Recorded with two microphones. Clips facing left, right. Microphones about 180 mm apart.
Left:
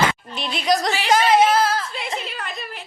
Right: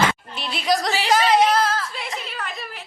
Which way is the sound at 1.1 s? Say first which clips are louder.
Left 1 dB; centre (ahead or behind).